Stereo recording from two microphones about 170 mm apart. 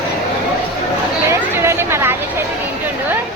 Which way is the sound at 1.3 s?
15° right (ahead or behind).